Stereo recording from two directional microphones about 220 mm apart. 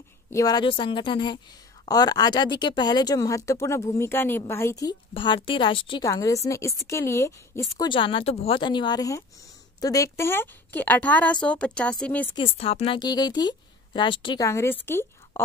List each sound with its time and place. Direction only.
0.3 s a woman's voice: 15° left (ahead or behind)
12.4 s a woman's voice: 25° left (ahead or behind); by 15.4 s 10° left (ahead or behind)